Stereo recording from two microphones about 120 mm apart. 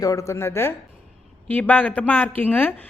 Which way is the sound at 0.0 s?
30° left (ahead or behind).